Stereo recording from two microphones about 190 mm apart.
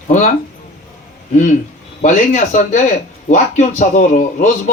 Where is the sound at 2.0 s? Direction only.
40° left (ahead or behind).